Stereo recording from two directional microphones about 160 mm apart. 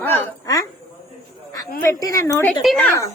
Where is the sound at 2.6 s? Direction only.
5° left (ahead or behind).